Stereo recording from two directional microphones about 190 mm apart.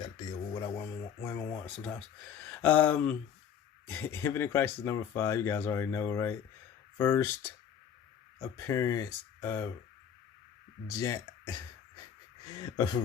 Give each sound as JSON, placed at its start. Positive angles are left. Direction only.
{"t": 0.0, "sound": "a sound", "side_deg": 20}
{"t": 1.6, "sound": "speech", "side_deg": 5}
{"t": 2.4, "sound": "a sound", "side_deg": 10}
{"t": 3.8, "sound": "speech", "side_deg": 10}
{"t": 8.4, "sound": "speech", "side_deg": 15}
{"t": 10.9, "sound": "speech", "side_deg": 15}
{"t": 12.5, "sound": "speech", "side_deg": 20}